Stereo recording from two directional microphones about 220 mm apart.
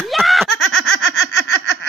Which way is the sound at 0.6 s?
55° left (ahead or behind).